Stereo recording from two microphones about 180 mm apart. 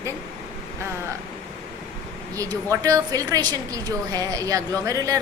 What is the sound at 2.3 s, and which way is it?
A woman's voice, 20° right (ahead or behind).